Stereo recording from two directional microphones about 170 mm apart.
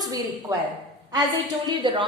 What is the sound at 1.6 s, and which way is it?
Speech, 30° right (ahead or behind).